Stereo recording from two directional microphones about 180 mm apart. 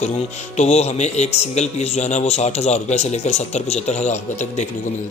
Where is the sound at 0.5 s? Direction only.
40° left (ahead or behind).